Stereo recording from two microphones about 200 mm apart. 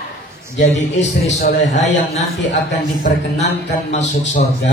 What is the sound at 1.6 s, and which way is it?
A man's voice, 35° left (ahead or behind).